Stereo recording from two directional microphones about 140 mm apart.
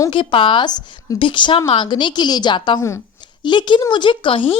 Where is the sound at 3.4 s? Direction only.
35° left (ahead or behind).